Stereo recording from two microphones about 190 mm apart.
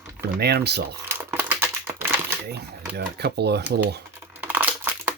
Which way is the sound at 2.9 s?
60° right (ahead or behind).